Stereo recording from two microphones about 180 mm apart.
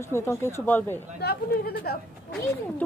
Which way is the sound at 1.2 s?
60° left (ahead or behind).